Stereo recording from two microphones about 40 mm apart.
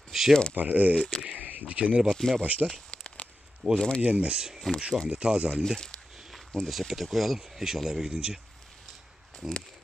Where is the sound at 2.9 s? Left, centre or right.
Left.